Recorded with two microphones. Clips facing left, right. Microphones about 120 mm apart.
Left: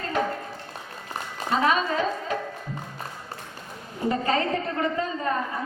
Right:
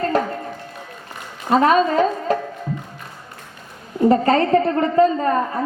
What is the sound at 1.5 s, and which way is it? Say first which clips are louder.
Speech: right 8 dB; 45° right (ahead or behind).